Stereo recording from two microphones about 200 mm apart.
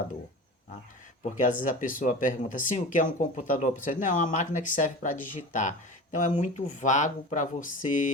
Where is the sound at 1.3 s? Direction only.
40° left (ahead or behind).